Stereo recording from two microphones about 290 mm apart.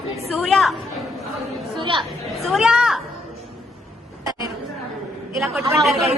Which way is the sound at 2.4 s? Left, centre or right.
Centre.